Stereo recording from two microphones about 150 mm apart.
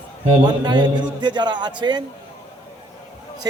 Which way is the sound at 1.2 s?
30° right (ahead or behind).